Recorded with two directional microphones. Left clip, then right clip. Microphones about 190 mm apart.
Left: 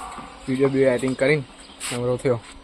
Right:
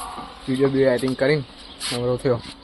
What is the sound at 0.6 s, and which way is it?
Speech, 10° left (ahead or behind).